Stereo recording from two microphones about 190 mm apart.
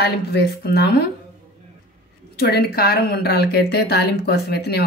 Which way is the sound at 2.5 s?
55° left (ahead or behind).